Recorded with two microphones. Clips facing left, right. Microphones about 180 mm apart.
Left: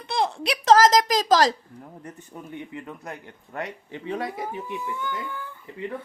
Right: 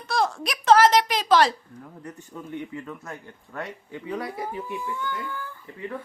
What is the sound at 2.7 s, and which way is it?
Speech, 20° left (ahead or behind).